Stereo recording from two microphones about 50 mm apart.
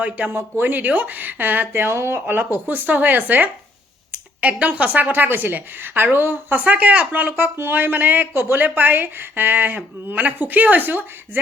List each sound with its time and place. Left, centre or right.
0.3 s speech: right
2.0 s speech: right
2.2 s speech: right
6.7 s speech: right
7.5 s speech: right